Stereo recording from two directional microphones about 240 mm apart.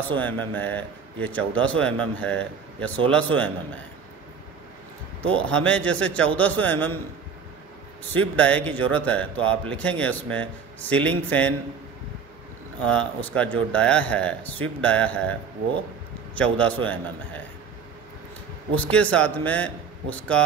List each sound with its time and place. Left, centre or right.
0.1 s a man's voice: centre
5.2 s a man's voice: centre
8.1 s a man's voice: centre
12.8 s a man's voice: centre
16.5 s a man's voice: centre
18.8 s a man's voice: centre